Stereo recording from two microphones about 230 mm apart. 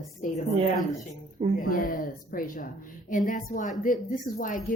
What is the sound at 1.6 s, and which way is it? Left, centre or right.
A woman's voice, left.